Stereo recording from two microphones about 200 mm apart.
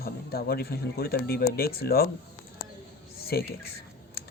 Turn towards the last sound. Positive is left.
turn(degrees=50)  # may be behind; listen again after turning